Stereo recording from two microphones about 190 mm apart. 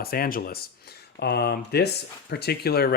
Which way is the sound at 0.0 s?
50° left (ahead or behind).